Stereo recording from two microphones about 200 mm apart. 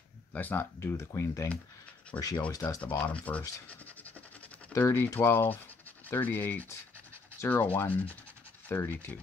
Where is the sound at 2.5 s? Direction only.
15° left (ahead or behind).